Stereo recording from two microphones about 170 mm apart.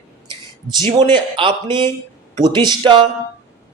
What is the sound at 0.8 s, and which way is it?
A man's voice, 25° right (ahead or behind).